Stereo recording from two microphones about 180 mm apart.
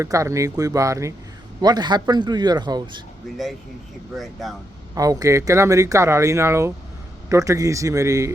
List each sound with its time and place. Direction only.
0.0 s speech: 15° right (ahead or behind)
3.3 s speech: centre (ahead or behind)
4.9 s speech: 20° right (ahead or behind)